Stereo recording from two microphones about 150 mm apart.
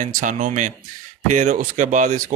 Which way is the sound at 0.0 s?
60° right (ahead or behind).